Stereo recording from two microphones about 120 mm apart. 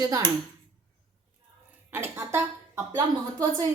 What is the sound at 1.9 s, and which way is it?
Speech, 20° right (ahead or behind).